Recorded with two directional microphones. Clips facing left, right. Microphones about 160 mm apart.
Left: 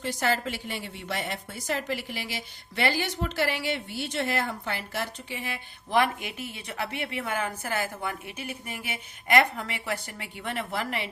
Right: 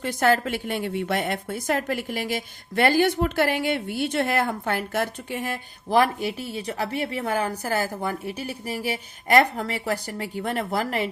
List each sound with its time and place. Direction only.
0.0 s a woman's voice: 55° right (ahead or behind)